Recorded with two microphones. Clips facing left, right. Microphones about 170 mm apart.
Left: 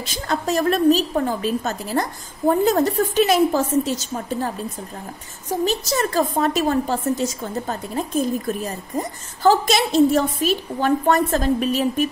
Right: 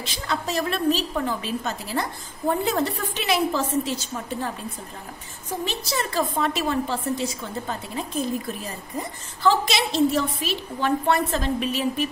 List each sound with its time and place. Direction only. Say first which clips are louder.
0.0 s a woman's voice: left 4 dB; 45° left (ahead or behind)
5.5 s a woman's voice: left 7 dB; 40° left (ahead or behind)
8.6 s a woman's voice: left 5 dB; 45° left (ahead or behind)